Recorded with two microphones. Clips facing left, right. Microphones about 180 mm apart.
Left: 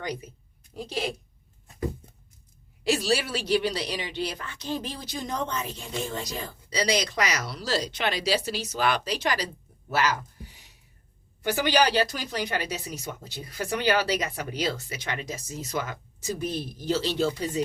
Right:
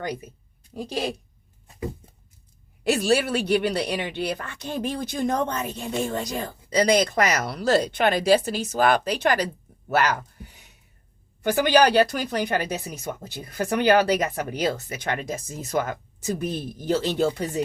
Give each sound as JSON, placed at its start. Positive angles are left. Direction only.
{"t": 2.8, "sound": "speech", "side_deg": -55}
{"t": 11.5, "sound": "speech", "side_deg": -55}